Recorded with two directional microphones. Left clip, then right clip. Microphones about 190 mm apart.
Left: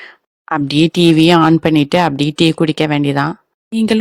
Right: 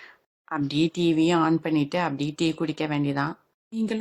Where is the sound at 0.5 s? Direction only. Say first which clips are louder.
Left 12 dB; 45° left (ahead or behind).